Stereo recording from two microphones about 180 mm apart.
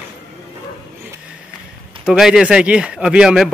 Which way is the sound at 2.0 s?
Centre (ahead or behind).